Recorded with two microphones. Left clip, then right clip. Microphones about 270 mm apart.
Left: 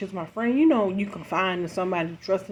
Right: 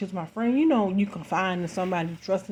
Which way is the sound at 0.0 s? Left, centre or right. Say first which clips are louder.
Left 1 dB; right.